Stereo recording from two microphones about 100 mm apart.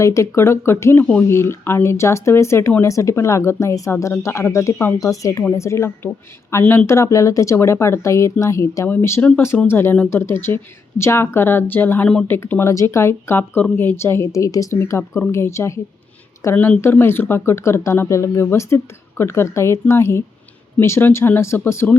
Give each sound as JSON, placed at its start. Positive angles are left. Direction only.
{"t": 0.0, "sound": "speech", "side_deg": 30}
{"t": 16.6, "sound": "speech", "side_deg": 15}